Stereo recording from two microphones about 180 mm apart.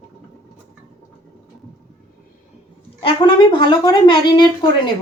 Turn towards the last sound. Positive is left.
turn(degrees=25)  # may be behind; listen again after turning